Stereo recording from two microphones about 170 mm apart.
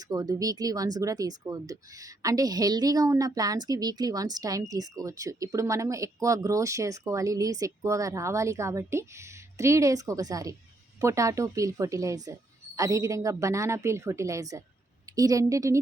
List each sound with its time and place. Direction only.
0.0 s speech: 20° right (ahead or behind)